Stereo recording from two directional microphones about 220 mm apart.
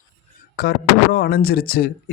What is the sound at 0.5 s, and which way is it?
Speech, 45° left (ahead or behind).